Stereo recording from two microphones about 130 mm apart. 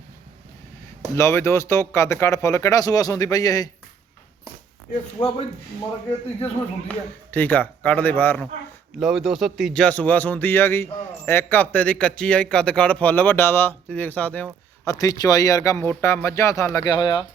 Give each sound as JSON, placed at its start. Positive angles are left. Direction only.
{"t": 1.1, "sound": "speech", "side_deg": 20}
{"t": 6.4, "sound": "speech", "side_deg": 15}
{"t": 9.0, "sound": "speech", "side_deg": 0}
{"t": 9.8, "sound": "speech", "side_deg": 10}
{"t": 14.8, "sound": "speech", "side_deg": 25}
{"t": 15.9, "sound": "speech", "side_deg": 15}